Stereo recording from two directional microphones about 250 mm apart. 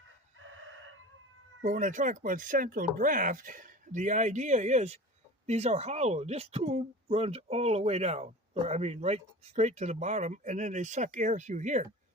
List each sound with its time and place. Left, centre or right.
0.3 s chicken: right
1.6 s speech: right